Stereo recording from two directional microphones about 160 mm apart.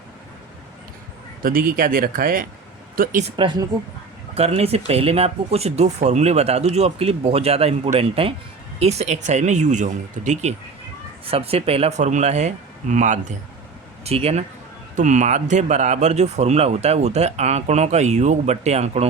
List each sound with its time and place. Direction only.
1.4 s speech: 65° right (ahead or behind)
3.2 s speech: 30° right (ahead or behind); by 10.5 s 50° right (ahead or behind)
11.3 s speech: 40° right (ahead or behind)
14.9 s speech: 50° right (ahead or behind)